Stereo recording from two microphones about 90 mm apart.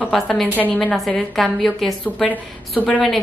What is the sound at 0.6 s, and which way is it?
Speech, 15° left (ahead or behind).